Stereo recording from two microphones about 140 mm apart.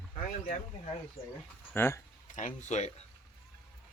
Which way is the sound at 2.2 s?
60° left (ahead or behind).